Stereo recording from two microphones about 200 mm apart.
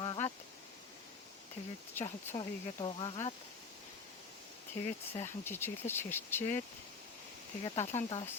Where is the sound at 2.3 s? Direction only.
25° left (ahead or behind).